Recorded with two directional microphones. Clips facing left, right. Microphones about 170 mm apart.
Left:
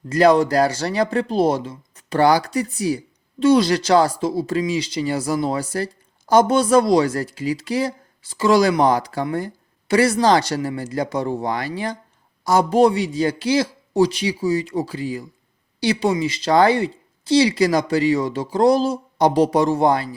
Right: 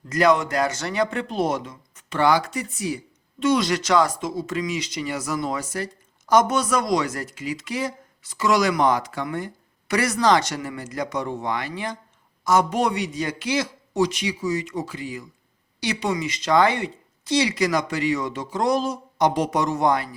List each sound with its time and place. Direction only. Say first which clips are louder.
0.1 s speech: left 5 dB; 30° left (ahead or behind)